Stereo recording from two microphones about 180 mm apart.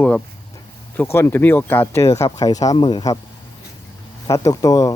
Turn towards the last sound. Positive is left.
turn(degrees=20)  # may be behind; listen again after turning